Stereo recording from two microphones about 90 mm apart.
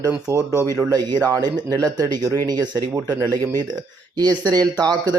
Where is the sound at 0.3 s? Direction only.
40° right (ahead or behind).